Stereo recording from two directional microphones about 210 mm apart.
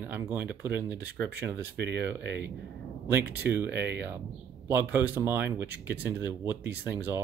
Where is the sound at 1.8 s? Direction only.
55° right (ahead or behind).